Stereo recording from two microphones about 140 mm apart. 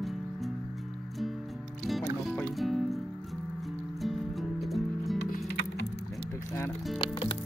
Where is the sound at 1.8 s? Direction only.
Centre (ahead or behind).